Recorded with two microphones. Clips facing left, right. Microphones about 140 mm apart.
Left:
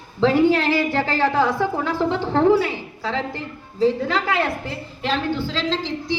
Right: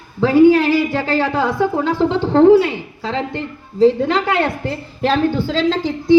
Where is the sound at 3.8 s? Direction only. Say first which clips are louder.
Right 6 dB; 30° right (ahead or behind).